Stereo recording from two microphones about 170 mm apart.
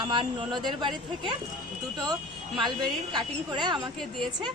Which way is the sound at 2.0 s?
25° right (ahead or behind).